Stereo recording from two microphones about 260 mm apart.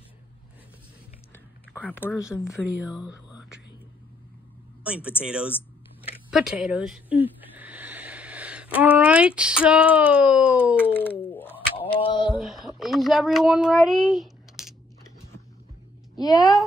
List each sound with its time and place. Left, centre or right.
1.7 s speech: centre
2.4 s speech: centre
4.8 s a woman's voice: centre
10.9 s speech: centre
11.9 s a sound: centre
12.4 s a child's voice: centre
16.2 s speech: centre